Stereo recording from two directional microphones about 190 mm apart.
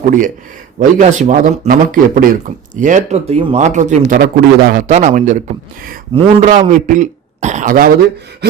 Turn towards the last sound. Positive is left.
turn(degrees=-45)  # may be behind; listen again after turning